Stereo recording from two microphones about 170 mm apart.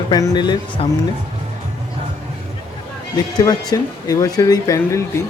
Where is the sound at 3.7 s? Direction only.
20° left (ahead or behind).